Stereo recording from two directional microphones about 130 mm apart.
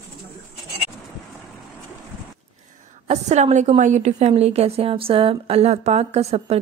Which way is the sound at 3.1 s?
60° right (ahead or behind).